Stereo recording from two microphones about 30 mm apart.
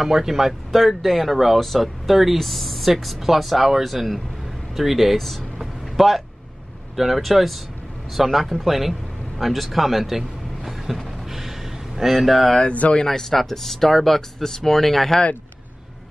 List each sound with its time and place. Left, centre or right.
0.0 s speech: centre
5.1 s speech: centre
5.6 s a sound: centre
7.2 s speech: centre
11.2 s a sound: centre
13.0 s speech: centre